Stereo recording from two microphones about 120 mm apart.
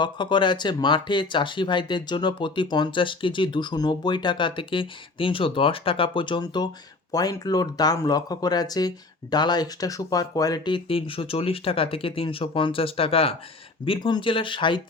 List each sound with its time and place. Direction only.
0.0 s speech: 40° left (ahead or behind)
13.8 s speech: 40° left (ahead or behind)